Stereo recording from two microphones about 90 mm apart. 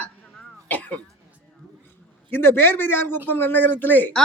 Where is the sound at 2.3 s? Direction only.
25° left (ahead or behind).